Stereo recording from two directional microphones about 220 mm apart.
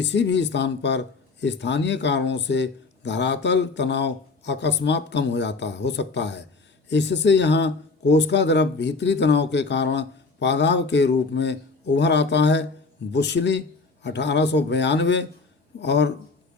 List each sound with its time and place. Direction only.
0.0 s speech: 55° left (ahead or behind)